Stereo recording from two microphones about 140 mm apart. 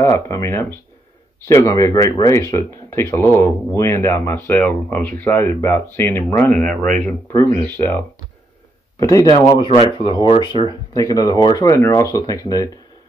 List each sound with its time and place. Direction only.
0.0 s speech: 20° left (ahead or behind)
6.6 s a man's voice: 5° left (ahead or behind)
7.0 s speech: 15° left (ahead or behind)
9.0 s speech: 25° left (ahead or behind)
9.3 s speech: 35° left (ahead or behind)